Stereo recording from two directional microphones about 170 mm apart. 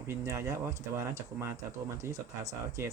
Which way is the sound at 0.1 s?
20° right (ahead or behind).